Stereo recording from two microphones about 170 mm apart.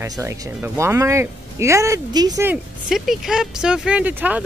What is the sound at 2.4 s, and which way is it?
Speech, centre (ahead or behind).